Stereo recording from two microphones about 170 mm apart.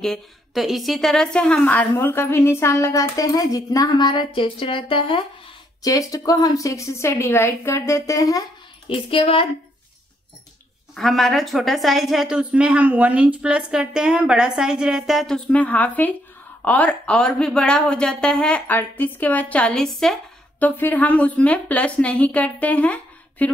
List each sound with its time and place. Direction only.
0.0 s speech: centre (ahead or behind); by 5.2 s 30° left (ahead or behind)
5.8 s a woman's voice: 20° left (ahead or behind)
8.8 s speech: 30° left (ahead or behind)
11.0 s speech: centre (ahead or behind)